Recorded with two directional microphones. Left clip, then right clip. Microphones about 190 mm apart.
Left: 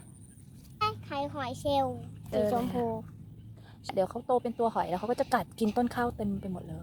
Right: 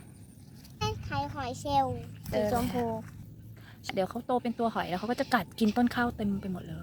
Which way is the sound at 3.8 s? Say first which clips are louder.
Left 2 dB; 5° left (ahead or behind).